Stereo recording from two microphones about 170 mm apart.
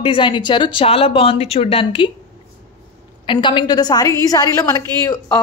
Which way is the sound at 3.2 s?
30° left (ahead or behind).